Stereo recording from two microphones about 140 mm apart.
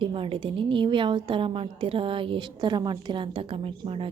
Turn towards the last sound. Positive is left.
turn(degrees=-40)  # may be behind; listen again after turning